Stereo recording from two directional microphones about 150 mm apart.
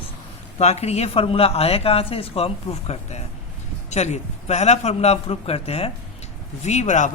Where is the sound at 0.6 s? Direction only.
45° left (ahead or behind).